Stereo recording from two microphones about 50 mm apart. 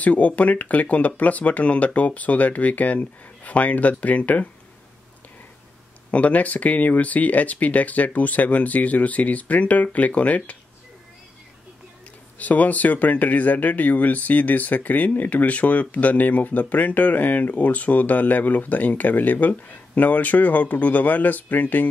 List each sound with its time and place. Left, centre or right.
0.0 s speech: left
6.1 s speech: left
12.4 s speech: left